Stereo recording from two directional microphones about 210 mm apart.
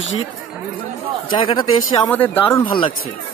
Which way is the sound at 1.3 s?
20° left (ahead or behind).